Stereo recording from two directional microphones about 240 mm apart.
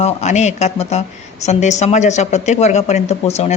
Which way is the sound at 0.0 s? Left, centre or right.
Left.